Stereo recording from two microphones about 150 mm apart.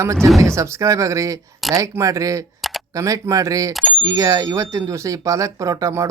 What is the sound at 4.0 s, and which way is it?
Speech, 20° right (ahead or behind).